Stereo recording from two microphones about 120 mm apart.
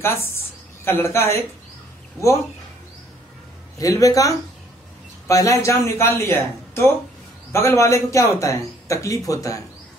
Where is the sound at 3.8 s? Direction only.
30° left (ahead or behind).